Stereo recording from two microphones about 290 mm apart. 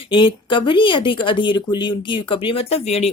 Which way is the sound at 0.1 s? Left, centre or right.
Centre.